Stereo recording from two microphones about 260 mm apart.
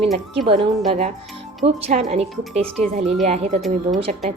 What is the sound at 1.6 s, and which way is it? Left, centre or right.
A woman's voice, right.